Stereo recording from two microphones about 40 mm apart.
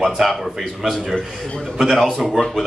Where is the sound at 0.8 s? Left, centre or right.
Centre.